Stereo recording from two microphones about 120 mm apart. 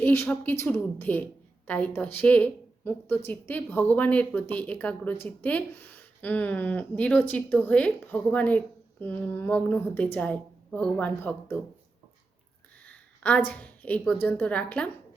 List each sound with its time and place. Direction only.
0.0 s a woman's voice: 15° left (ahead or behind)
12.8 s a woman's voice: 10° left (ahead or behind)